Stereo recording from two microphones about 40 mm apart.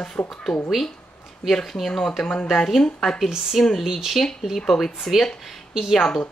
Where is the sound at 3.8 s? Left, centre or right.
Centre.